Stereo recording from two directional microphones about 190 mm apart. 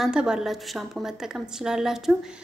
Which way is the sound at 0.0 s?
5° right (ahead or behind).